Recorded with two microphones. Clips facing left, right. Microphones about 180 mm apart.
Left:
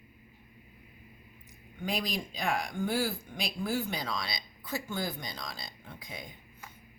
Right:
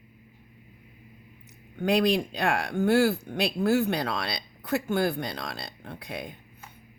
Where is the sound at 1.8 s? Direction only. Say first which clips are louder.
Right 11 dB; 70° right (ahead or behind).